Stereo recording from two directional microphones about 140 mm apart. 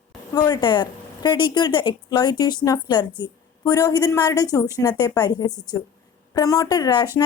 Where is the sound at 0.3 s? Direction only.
30° left (ahead or behind).